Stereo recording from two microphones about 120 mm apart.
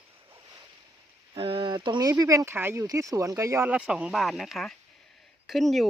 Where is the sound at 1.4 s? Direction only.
45° right (ahead or behind); by 3.7 s 25° right (ahead or behind).